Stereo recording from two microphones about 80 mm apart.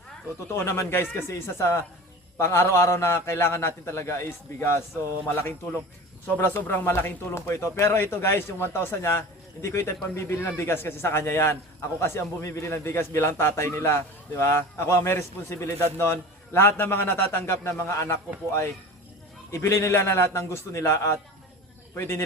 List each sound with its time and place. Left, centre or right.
0.5 s a man's voice: left
6.2 s a man's voice: left
19.5 s a man's voice: left